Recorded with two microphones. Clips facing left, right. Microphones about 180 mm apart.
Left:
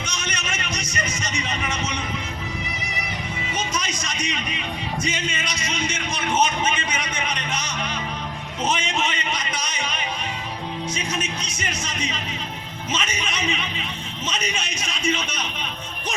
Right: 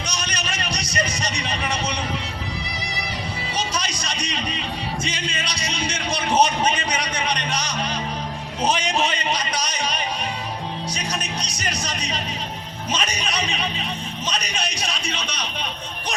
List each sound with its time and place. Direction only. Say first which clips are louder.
0.1 s music: right 1 dB; 35° right (ahead or behind)
3.5 s music: even; 35° right (ahead or behind)